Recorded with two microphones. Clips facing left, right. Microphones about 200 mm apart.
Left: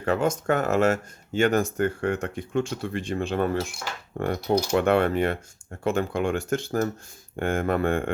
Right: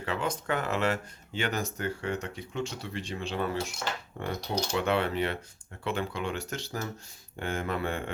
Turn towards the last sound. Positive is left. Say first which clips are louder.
# left 8 dB
turn(degrees=50)  # may be behind; listen again after turning